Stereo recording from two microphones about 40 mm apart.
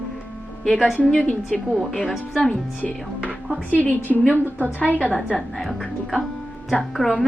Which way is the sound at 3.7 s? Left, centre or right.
Left.